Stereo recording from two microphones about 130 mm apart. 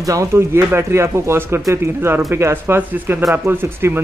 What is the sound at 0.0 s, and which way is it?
Speech, 25° right (ahead or behind).